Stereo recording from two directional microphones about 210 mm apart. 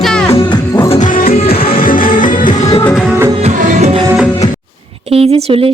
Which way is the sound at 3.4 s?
30° right (ahead or behind).